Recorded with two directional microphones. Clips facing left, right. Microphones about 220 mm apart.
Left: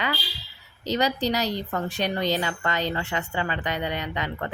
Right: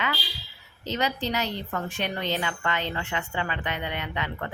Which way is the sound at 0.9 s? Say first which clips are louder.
Left 4 dB; 35° left (ahead or behind).